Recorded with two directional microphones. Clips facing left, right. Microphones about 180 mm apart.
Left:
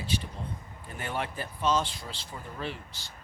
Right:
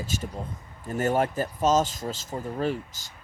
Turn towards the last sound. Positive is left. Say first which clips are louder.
# right 9 dB
turn(degrees=-45)  # may be behind; listen again after turning